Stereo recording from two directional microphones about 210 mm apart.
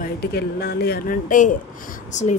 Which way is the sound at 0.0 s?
50° left (ahead or behind).